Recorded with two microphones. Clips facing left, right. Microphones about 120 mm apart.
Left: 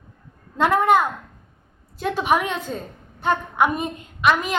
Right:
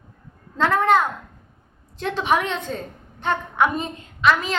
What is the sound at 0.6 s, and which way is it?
A woman's voice, 10° left (ahead or behind).